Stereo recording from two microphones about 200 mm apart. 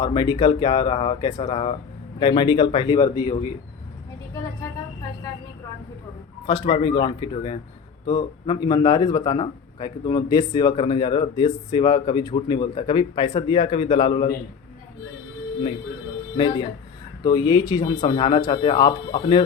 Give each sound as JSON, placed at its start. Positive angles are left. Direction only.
{"t": 0.0, "sound": "a man's voice", "side_deg": 20}
{"t": 6.4, "sound": "a man's voice", "side_deg": 25}
{"t": 17.2, "sound": "a man's voice", "side_deg": 20}